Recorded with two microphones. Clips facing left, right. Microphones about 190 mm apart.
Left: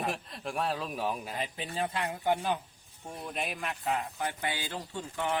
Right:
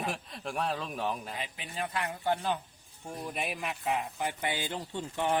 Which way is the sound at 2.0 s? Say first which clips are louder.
Even; 15° left (ahead or behind).